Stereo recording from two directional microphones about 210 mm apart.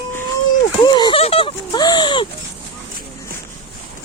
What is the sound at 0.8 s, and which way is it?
Speech, 20° left (ahead or behind).